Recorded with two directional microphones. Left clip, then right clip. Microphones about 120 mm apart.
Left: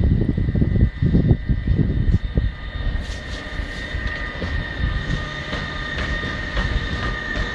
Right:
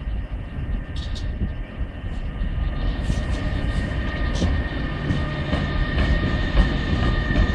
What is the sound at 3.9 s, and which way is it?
Vehicle, 35° left (ahead or behind).